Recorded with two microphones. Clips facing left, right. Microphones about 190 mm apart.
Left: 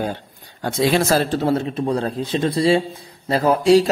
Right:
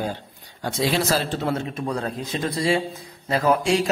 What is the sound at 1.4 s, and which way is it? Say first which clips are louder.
A man's voice: left 6 dB; 35° left (ahead or behind).